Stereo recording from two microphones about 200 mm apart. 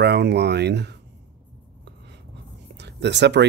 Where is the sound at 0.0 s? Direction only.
55° right (ahead or behind).